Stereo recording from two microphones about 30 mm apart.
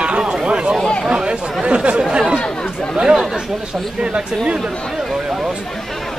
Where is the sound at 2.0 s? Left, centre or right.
Right.